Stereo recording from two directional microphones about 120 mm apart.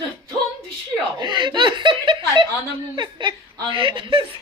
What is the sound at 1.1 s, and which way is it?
Speech, 40° right (ahead or behind).